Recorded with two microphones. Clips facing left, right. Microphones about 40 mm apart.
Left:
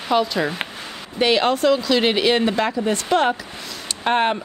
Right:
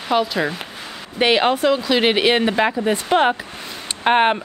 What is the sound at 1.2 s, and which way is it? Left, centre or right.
Speech, centre.